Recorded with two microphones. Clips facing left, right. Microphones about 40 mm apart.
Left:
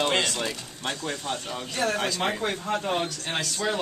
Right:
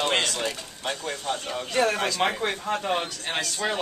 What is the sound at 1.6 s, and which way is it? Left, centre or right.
Speech, right.